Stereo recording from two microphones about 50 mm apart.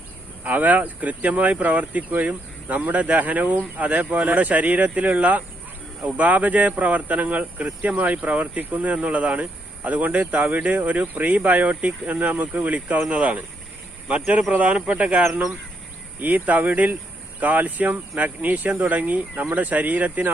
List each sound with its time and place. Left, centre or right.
0.4 s speech: right